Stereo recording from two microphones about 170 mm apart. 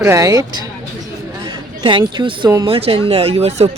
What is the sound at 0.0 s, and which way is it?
Speech, 20° right (ahead or behind).